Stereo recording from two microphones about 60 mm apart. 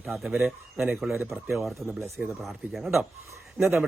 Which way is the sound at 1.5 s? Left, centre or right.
Centre.